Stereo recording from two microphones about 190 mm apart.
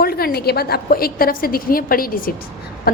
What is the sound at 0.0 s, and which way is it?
A woman's voice, 55° left (ahead or behind).